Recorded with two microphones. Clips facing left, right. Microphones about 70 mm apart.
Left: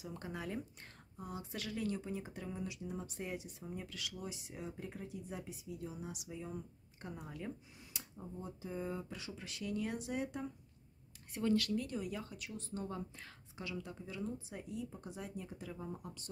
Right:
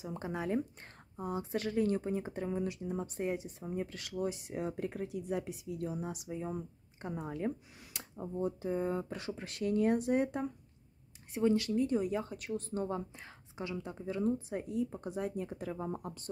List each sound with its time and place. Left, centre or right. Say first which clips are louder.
0.0 s speech: right 7 dB; right
5.9 s speech: right 7 dB; right
7.9 s speech: right 9 dB; right
11.3 s speech: right 5 dB; right
12.4 s speech: right 8 dB; right